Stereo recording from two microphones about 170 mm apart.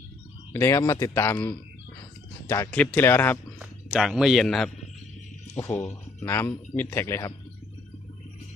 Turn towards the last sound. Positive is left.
turn(degrees=15)  # may be behind; listen again after turning